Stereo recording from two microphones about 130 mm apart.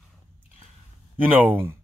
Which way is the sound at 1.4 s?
15° right (ahead or behind).